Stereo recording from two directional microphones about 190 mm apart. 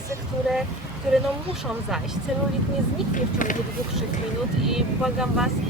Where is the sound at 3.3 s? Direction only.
45° left (ahead or behind).